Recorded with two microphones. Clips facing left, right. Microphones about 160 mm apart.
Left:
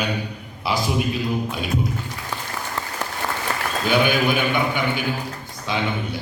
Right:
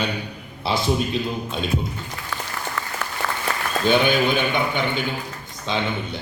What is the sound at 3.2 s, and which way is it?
Applause, 30° left (ahead or behind).